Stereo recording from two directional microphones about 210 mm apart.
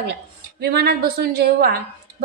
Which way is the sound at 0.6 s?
50° right (ahead or behind).